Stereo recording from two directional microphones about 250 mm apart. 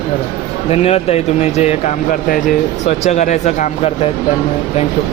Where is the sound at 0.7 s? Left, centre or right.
Left.